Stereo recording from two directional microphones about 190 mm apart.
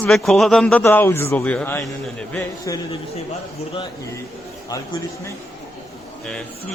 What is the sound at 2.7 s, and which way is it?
Speech, 15° left (ahead or behind).